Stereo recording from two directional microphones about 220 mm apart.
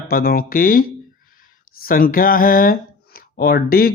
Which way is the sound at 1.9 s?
40° left (ahead or behind).